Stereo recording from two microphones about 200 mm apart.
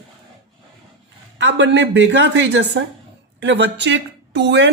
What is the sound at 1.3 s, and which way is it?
A woman's voice, 65° right (ahead or behind).